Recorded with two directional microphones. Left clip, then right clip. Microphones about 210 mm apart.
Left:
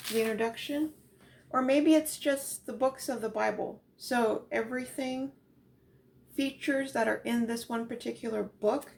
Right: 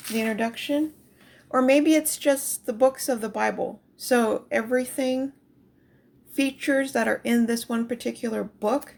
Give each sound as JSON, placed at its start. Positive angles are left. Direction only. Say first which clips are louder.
{"t": 0.2, "sound": "speech", "louder": "right 3 dB", "side_deg": -50}
{"t": 6.3, "sound": "speech", "louder": "right 7 dB", "side_deg": -45}